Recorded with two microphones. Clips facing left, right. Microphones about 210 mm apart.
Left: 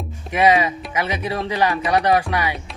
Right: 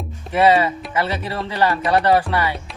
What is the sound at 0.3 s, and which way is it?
Speech, 15° left (ahead or behind).